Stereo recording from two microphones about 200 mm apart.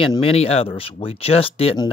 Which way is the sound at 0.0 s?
25° left (ahead or behind).